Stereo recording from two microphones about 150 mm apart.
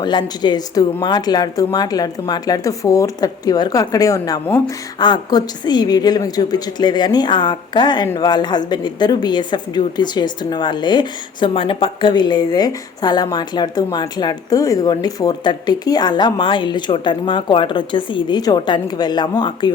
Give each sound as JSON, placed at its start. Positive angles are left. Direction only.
{"t": 0.0, "sound": "a woman's voice", "side_deg": 30}